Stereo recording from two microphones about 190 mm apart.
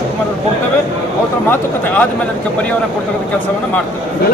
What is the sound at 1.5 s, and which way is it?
Speech, 10° left (ahead or behind).